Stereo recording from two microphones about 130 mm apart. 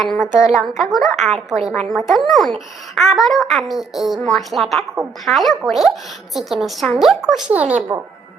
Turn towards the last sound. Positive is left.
turn(degrees=-10)  # may be behind; listen again after turning